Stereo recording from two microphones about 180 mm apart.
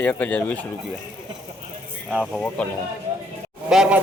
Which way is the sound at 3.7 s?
5° right (ahead or behind).